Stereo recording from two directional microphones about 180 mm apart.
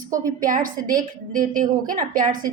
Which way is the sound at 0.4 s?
50° right (ahead or behind).